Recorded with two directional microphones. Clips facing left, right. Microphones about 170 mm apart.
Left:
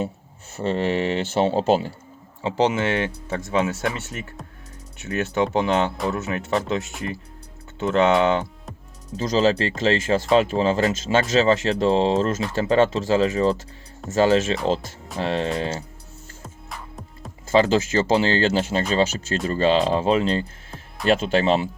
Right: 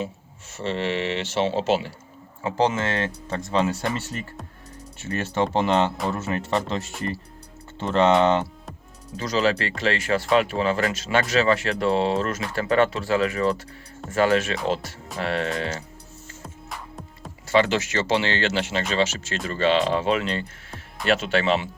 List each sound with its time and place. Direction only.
0.6 s speech: 40° left (ahead or behind)
2.6 s speech: 15° left (ahead or behind)
3.4 s speech: centre (ahead or behind)
9.1 s speech: 30° left (ahead or behind)
17.5 s speech: 35° left (ahead or behind)